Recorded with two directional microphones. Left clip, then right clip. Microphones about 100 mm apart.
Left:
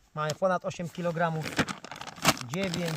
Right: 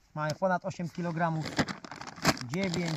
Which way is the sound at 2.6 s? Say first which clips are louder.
Left 1 dB; centre (ahead or behind).